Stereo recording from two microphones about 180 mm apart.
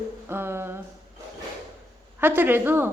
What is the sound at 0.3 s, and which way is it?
Speech, 15° right (ahead or behind).